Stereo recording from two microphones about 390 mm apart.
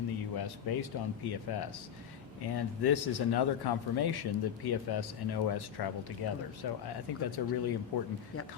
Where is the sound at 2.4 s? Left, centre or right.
Left.